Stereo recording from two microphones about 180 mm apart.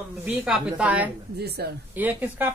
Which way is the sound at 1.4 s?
60° right (ahead or behind).